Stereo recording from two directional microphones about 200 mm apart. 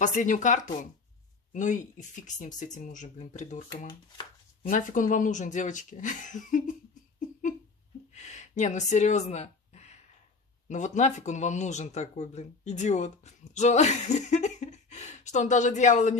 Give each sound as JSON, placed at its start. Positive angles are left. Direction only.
{"t": 0.0, "sound": "speech", "side_deg": 40}
{"t": 4.6, "sound": "speech", "side_deg": 40}
{"t": 8.1, "sound": "a sound", "side_deg": 35}
{"t": 10.7, "sound": "speech", "side_deg": 35}